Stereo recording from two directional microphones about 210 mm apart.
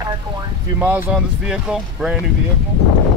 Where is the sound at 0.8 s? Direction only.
10° right (ahead or behind).